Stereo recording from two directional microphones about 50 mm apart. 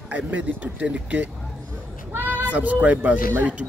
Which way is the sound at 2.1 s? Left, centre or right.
Right.